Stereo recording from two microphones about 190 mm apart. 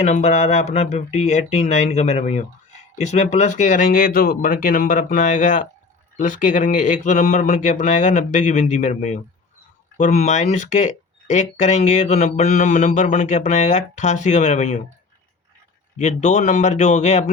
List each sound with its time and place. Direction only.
0.0 s speech: 35° left (ahead or behind)
16.0 s speech: 40° left (ahead or behind)